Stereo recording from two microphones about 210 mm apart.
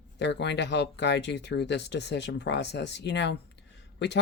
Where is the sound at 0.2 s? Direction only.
55° left (ahead or behind).